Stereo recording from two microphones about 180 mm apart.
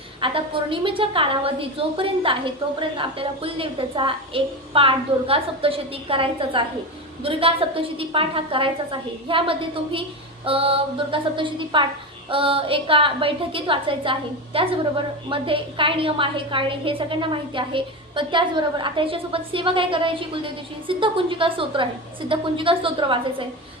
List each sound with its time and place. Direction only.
0.2 s a woman's voice: 30° right (ahead or behind)